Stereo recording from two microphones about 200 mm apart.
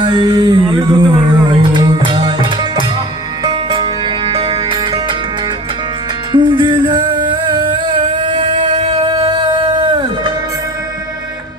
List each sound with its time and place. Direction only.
0.0 s a sound: 25° right (ahead or behind)
2.0 s music: 25° right (ahead or behind)
6.3 s music: 25° right (ahead or behind)
8.8 s music: 30° right (ahead or behind)